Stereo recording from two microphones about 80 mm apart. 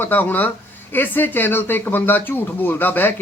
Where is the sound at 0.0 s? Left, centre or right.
Left.